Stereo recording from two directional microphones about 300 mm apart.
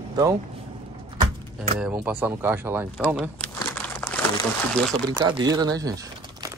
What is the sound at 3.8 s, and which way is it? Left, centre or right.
Crumpling, centre.